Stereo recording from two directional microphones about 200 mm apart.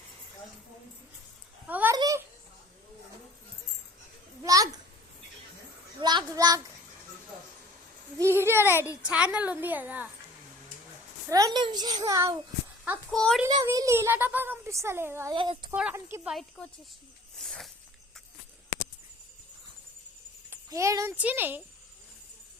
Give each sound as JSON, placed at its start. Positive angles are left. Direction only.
{"t": 1.6, "sound": "a sound", "side_deg": -10}
{"t": 4.4, "sound": "a sound", "side_deg": -15}
{"t": 6.0, "sound": "child singing", "side_deg": -20}
{"t": 8.2, "sound": "a child's voice", "side_deg": -10}
{"t": 8.7, "sound": "a woman's voice", "side_deg": 15}
{"t": 9.0, "sound": "a child's voice", "side_deg": -5}
{"t": 11.3, "sound": "a child's voice", "side_deg": -15}
{"t": 12.8, "sound": "a child's voice", "side_deg": -5}
{"t": 13.5, "sound": "a child's voice", "side_deg": -20}
{"t": 15.4, "sound": "a child's voice", "side_deg": -25}
{"t": 15.7, "sound": "speech", "side_deg": -10}
{"t": 17.3, "sound": "a sound", "side_deg": 0}
{"t": 20.5, "sound": "a child's voice", "side_deg": -15}